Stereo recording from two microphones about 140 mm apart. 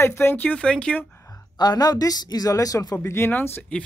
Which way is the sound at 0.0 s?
20° left (ahead or behind).